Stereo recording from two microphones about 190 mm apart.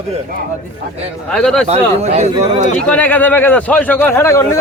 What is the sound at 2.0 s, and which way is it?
Speech, 35° right (ahead or behind).